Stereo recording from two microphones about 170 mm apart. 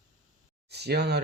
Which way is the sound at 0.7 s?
75° right (ahead or behind).